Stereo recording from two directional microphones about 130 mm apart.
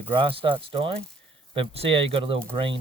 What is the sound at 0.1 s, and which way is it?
Speech, 40° right (ahead or behind).